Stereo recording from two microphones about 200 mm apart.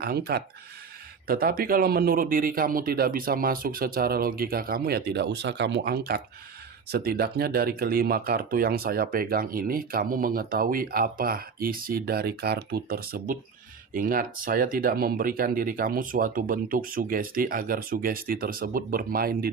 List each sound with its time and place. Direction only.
0.0 s speech: 50° right (ahead or behind)